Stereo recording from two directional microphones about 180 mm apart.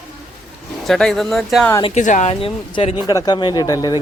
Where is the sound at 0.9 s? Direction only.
Centre (ahead or behind).